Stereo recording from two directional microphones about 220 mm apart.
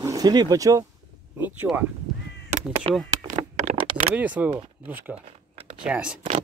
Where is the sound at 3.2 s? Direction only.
30° right (ahead or behind).